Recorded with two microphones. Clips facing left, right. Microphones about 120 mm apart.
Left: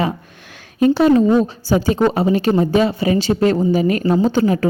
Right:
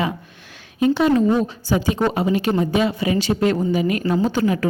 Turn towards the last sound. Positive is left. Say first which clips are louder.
# left 4 dB
turn(degrees=35)  # may be behind; listen again after turning